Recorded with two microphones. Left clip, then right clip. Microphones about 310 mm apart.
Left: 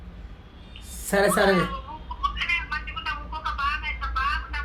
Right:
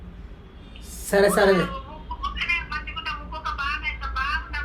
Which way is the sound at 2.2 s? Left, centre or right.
Centre.